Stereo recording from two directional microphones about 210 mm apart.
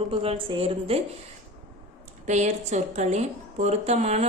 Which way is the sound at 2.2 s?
35° right (ahead or behind).